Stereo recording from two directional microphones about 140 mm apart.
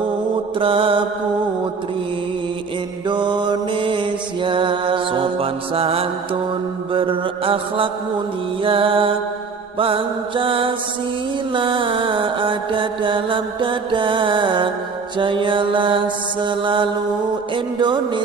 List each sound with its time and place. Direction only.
0.6 s mantra: 40° right (ahead or behind)
3.1 s mantra: 35° right (ahead or behind)